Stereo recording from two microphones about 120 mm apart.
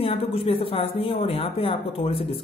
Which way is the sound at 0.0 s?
50° left (ahead or behind).